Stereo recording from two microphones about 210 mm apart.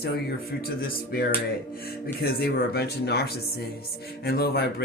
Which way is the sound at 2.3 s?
50° left (ahead or behind).